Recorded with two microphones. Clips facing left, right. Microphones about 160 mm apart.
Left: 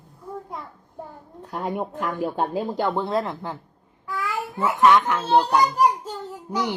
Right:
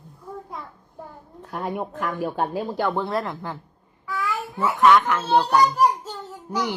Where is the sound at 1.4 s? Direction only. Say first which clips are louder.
Left 1 dB; 10° left (ahead or behind).